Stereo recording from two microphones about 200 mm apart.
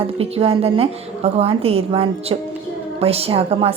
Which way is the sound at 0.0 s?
30° right (ahead or behind).